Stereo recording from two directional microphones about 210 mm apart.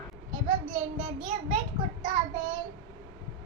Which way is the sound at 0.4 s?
35° right (ahead or behind).